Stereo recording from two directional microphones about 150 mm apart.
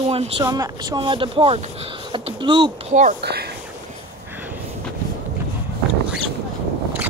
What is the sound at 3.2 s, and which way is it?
Speech, 90° right.